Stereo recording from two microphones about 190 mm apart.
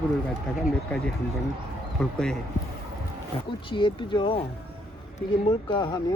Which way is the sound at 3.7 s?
25° left (ahead or behind).